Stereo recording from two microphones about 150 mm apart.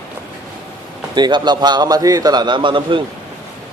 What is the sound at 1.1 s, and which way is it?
A man's voice, 30° right (ahead or behind).